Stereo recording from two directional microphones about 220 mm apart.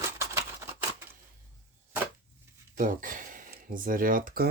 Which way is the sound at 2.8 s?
35° right (ahead or behind).